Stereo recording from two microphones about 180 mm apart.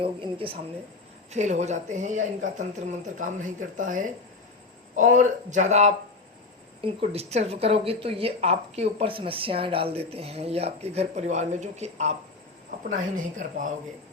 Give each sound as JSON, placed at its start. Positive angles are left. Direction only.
{"t": 0.0, "sound": "speech", "side_deg": -30}
{"t": 1.3, "sound": "speech", "side_deg": -40}